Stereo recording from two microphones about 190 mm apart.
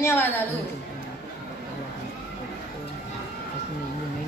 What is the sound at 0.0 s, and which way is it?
Speech, 10° left (ahead or behind).